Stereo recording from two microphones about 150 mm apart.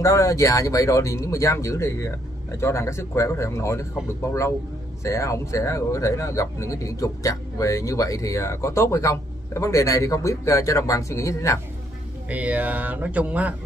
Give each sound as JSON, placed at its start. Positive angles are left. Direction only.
{"t": 0.0, "sound": "speech", "side_deg": 20}
{"t": 12.3, "sound": "speech", "side_deg": -10}